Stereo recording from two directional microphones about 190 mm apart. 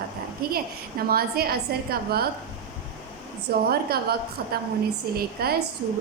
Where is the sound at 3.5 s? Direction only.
55° right (ahead or behind).